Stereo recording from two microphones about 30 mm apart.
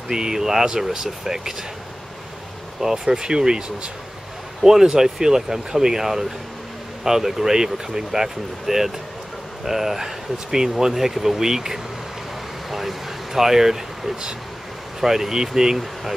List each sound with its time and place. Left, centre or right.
0.1 s speech: right
2.8 s speech: centre
15.8 s speech: centre